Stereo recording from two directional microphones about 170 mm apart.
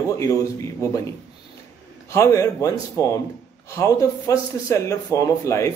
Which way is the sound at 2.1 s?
15° left (ahead or behind).